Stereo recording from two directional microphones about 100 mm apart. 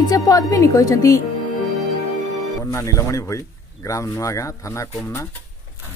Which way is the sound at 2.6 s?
30° left (ahead or behind).